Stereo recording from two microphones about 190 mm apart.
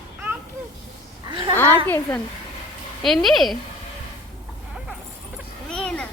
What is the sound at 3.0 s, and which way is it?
Speech, centre (ahead or behind).